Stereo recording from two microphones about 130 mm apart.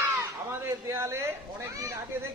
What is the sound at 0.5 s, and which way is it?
Speech, 20° right (ahead or behind).